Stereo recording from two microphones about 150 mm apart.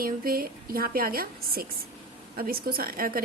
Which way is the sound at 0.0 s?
75° right (ahead or behind).